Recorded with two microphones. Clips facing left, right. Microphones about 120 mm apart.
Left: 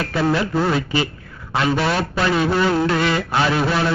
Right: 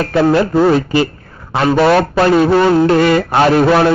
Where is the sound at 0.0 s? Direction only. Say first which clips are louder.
Right 8 dB; 50° right (ahead or behind).